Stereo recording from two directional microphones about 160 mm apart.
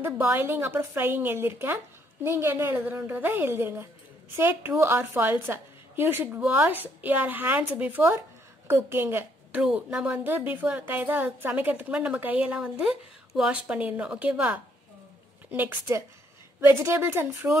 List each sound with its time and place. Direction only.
0.0 s a woman's voice: 15° right (ahead or behind)